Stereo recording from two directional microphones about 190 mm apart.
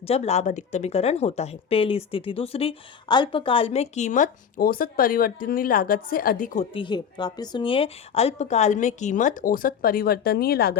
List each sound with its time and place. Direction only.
0.0 s speech: 35° left (ahead or behind)
6.7 s speech: 25° left (ahead or behind); by 10.8 s 55° left (ahead or behind)